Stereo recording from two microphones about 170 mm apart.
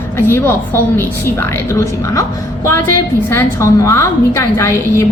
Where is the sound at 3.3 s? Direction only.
15° left (ahead or behind).